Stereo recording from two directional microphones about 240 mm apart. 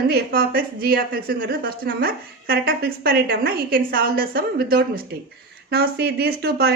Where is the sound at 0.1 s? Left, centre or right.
Right.